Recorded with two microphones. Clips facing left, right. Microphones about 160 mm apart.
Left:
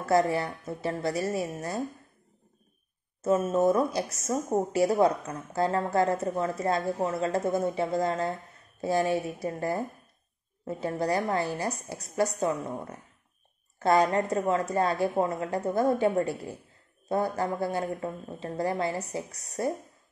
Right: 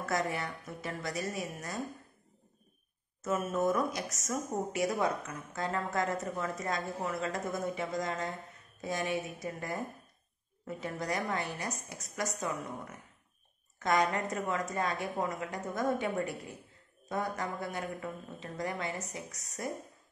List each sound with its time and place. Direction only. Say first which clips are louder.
0.0 s a woman's voice: left 9 dB; 30° left (ahead or behind)
3.2 s a woman's voice: left 7 dB; 30° left (ahead or behind)